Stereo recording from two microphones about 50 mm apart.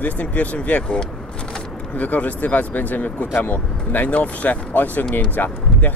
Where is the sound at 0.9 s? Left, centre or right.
Centre.